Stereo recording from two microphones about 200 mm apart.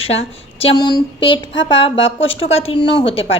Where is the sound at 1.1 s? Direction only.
25° left (ahead or behind).